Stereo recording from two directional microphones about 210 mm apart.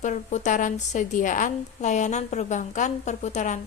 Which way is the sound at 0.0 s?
35° left (ahead or behind).